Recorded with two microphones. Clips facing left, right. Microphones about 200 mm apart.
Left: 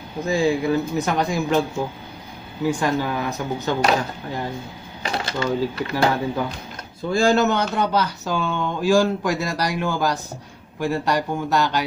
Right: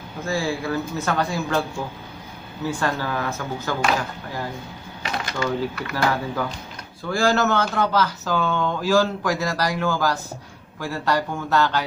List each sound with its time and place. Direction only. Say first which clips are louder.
0.2 s speech: left 5 dB; 20° left (ahead or behind)
2.6 s speech: left 4 dB; 15° left (ahead or behind)
5.0 s speech: left 2 dB; 30° left (ahead or behind); by 11.8 s 15° left (ahead or behind)